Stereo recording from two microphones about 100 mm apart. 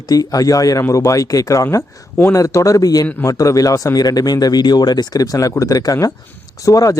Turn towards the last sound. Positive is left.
turn(degrees=35)  # may be behind; listen again after turning